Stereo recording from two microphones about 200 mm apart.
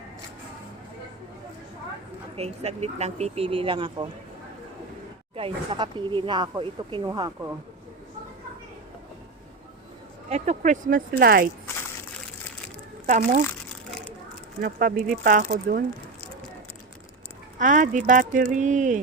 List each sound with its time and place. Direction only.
2.3 s speech: 30° right (ahead or behind)
5.4 s speech: 25° right (ahead or behind)
10.2 s speech: 35° right (ahead or behind)
13.1 s speech: 45° right (ahead or behind)
14.6 s speech: 45° right (ahead or behind)
17.6 s speech: 40° right (ahead or behind)